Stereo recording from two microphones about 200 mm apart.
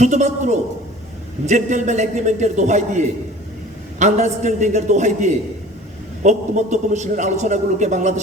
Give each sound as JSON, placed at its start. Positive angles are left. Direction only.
{"t": 0.0, "sound": "a man's voice", "side_deg": -35}